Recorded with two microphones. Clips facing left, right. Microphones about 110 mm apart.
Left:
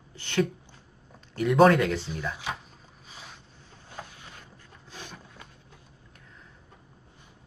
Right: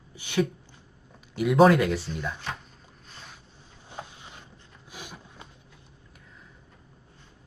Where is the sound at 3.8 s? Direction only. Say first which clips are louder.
Right 2 dB; 20° right (ahead or behind).